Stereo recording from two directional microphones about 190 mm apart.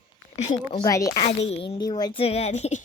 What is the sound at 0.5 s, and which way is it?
Speech, 20° left (ahead or behind).